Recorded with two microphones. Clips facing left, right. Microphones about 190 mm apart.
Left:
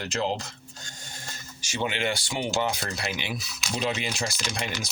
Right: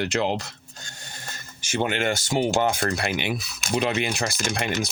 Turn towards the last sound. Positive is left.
turn(degrees=-55)  # may be behind; listen again after turning